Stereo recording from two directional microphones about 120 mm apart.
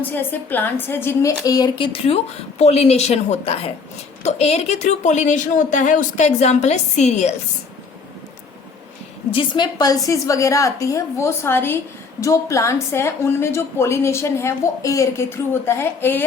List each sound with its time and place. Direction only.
0.1 s a woman's voice: 15° left (ahead or behind)
1.5 s speech: 35° left (ahead or behind)
1.9 s speech: 55° left (ahead or behind)
9.3 s a woman's voice: 45° left (ahead or behind)
9.7 s a woman's voice: 30° left (ahead or behind)